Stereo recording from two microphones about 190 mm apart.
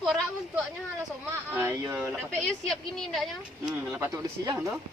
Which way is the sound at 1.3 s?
10° right (ahead or behind).